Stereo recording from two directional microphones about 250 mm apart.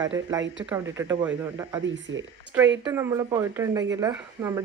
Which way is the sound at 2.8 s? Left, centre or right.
Centre.